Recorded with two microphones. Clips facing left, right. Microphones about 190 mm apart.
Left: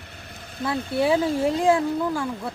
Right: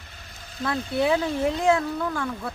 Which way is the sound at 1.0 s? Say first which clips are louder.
Left 2 dB; 30° left (ahead or behind).